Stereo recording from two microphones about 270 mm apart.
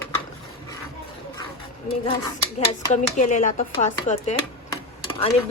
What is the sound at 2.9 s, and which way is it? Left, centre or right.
Speech, left.